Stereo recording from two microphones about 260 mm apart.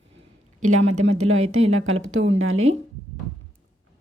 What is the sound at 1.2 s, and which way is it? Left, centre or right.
Speech, right.